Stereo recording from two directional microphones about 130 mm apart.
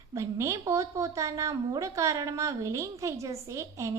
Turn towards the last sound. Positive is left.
turn(degrees=-25)  # may be behind; listen again after turning